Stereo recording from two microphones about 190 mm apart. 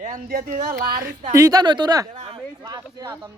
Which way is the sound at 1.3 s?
20° right (ahead or behind).